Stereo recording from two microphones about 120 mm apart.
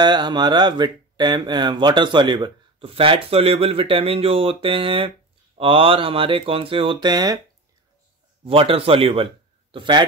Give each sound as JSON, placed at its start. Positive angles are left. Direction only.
{"t": 0.0, "sound": "speech", "side_deg": -40}
{"t": 2.8, "sound": "speech", "side_deg": -50}
{"t": 8.5, "sound": "a man's voice", "side_deg": -50}